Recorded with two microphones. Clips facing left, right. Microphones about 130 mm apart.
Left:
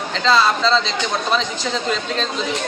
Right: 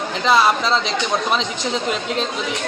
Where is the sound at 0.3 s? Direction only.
20° right (ahead or behind).